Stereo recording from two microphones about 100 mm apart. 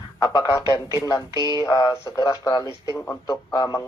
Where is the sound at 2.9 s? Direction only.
20° left (ahead or behind).